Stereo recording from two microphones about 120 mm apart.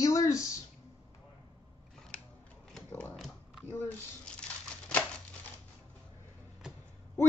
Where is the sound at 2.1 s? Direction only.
10° left (ahead or behind).